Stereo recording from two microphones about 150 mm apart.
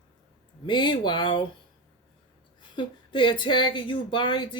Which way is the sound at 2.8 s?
30° left (ahead or behind).